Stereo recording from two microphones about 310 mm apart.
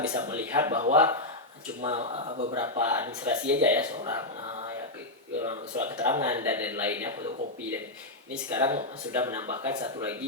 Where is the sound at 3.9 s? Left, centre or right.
Centre.